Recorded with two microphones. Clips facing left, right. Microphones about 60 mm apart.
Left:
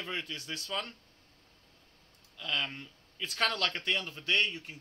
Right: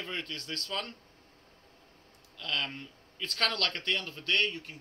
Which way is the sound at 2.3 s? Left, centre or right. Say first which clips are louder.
Even; centre.